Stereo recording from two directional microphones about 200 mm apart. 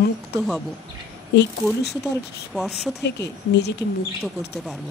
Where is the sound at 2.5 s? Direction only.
Centre (ahead or behind).